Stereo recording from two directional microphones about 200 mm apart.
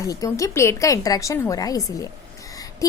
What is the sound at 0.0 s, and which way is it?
A woman's voice, 15° left (ahead or behind).